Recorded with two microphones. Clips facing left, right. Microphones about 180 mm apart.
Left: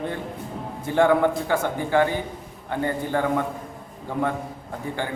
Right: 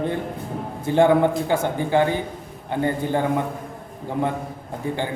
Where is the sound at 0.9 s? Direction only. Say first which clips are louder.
Right 2 dB; 20° right (ahead or behind).